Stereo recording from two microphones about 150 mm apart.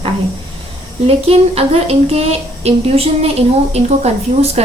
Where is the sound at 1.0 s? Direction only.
40° right (ahead or behind).